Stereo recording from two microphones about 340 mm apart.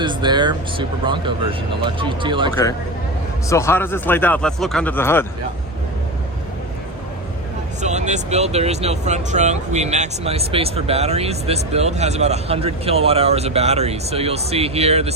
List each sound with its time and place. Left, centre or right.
0.0 s speech: centre
3.5 s speech: centre
7.8 s speech: right